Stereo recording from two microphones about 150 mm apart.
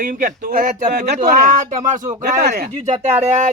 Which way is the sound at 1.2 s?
60° right (ahead or behind).